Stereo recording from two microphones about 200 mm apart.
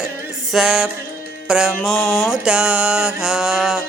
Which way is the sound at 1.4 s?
5° right (ahead or behind).